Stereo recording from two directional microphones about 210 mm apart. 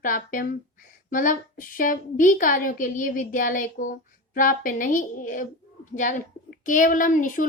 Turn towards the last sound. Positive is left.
turn(degrees=40)  # may be behind; listen again after turning